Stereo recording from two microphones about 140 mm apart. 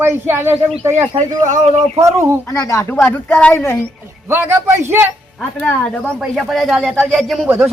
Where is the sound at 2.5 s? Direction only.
20° left (ahead or behind).